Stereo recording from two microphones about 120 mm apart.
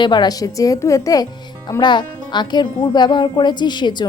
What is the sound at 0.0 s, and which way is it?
A woman's voice, 40° left (ahead or behind).